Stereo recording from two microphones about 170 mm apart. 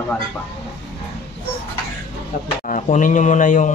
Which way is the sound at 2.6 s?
50° left (ahead or behind).